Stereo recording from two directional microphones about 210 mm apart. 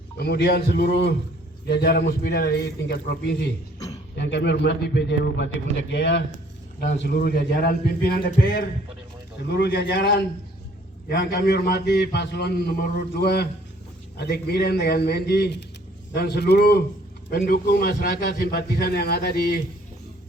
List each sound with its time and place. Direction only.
0.2 s a man's voice: 50° left (ahead or behind)